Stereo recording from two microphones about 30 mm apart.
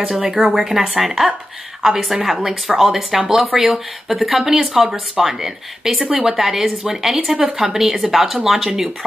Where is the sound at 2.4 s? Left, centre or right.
Centre.